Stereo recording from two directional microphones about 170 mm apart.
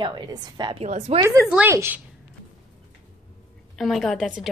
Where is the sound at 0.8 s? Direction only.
40° right (ahead or behind).